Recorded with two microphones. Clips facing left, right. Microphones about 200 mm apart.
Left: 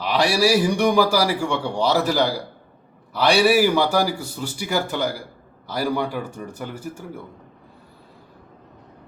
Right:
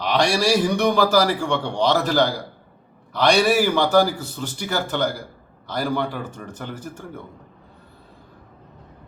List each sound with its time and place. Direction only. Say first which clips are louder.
0.0 s a man's voice: left 1 dB; 5° left (ahead or behind)